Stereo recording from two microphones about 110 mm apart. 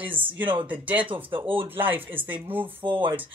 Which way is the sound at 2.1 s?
15° right (ahead or behind).